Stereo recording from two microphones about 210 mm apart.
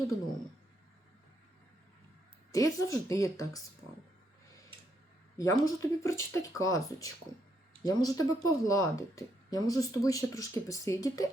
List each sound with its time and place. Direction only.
2.5 s speech: 15° left (ahead or behind)
5.4 s speech: 15° left (ahead or behind)